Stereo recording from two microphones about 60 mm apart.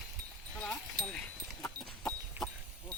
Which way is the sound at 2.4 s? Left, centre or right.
Centre.